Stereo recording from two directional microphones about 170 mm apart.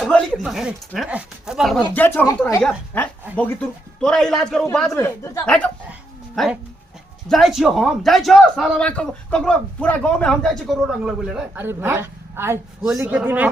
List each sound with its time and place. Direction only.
0.0 s a sound: centre (ahead or behind)
0.9 s a man's voice: centre (ahead or behind)
1.8 s a man's voice: 10° left (ahead or behind)
4.9 s speech: 15° left (ahead or behind)
5.9 s dog: 5° right (ahead or behind)
7.3 s a man's voice: centre (ahead or behind)